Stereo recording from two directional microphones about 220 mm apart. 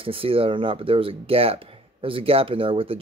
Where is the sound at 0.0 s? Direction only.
25° right (ahead or behind).